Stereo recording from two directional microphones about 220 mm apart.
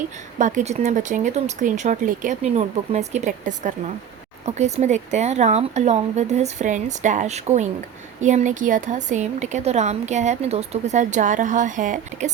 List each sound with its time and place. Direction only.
0.3 s a woman's voice: 35° right (ahead or behind)